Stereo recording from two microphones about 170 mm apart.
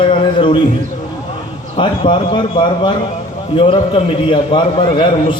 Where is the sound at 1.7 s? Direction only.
30° left (ahead or behind).